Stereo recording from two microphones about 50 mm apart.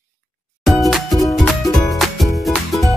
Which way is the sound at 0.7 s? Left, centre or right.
Centre.